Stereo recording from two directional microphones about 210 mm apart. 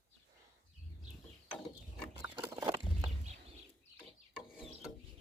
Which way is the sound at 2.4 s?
20° right (ahead or behind).